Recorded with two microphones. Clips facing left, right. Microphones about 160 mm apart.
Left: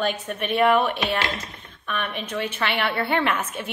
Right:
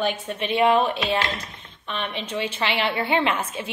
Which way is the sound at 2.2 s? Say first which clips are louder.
Right 2 dB; 10° right (ahead or behind).